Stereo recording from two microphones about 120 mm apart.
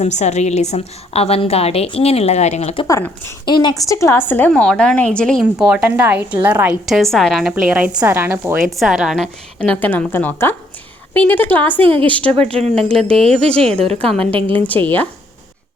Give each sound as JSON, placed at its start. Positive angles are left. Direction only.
{"t": 0.0, "sound": "a woman's voice", "side_deg": 70}
{"t": 2.8, "sound": "a woman's voice", "side_deg": 25}
{"t": 3.4, "sound": "a woman's voice", "side_deg": 40}
{"t": 5.4, "sound": "a woman's voice", "side_deg": -5}
{"t": 6.8, "sound": "a woman's voice", "side_deg": 0}
{"t": 8.0, "sound": "a woman's voice", "side_deg": -20}
{"t": 8.7, "sound": "a woman's voice", "side_deg": 0}
{"t": 9.6, "sound": "a woman's voice", "side_deg": 15}
{"t": 11.8, "sound": "a woman's voice", "side_deg": -50}
{"t": 12.0, "sound": "a woman's voice", "side_deg": 10}
{"t": 12.5, "sound": "speech", "side_deg": -60}
{"t": 12.9, "sound": "a woman's voice", "side_deg": 5}
{"t": 14.2, "sound": "a woman's voice", "side_deg": -50}
{"t": 14.4, "sound": "a woman's voice", "side_deg": 15}